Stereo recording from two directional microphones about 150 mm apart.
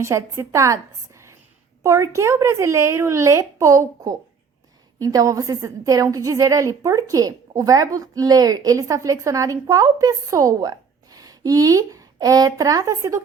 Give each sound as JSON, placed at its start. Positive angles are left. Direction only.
{"t": 0.0, "sound": "a woman's voice", "side_deg": -20}